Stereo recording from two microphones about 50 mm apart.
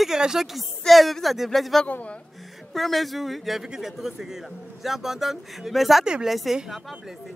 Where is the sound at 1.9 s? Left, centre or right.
Left.